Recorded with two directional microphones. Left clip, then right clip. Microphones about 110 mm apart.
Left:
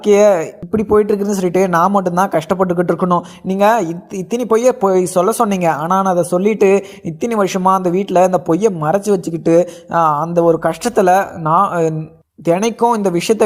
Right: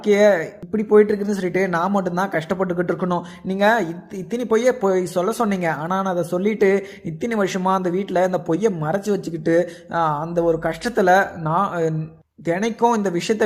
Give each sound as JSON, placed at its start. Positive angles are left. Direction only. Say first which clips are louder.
{"t": 0.0, "sound": "speech", "louder": "left 5 dB", "side_deg": 40}